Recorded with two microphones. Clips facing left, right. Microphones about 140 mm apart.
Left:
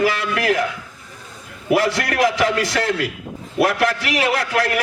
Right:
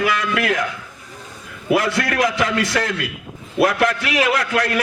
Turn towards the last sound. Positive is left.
turn(degrees=25)  # may be behind; listen again after turning